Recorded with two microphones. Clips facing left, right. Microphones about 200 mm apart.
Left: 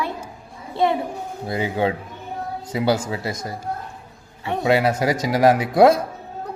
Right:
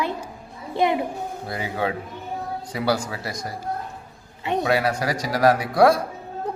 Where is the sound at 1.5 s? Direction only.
25° left (ahead or behind).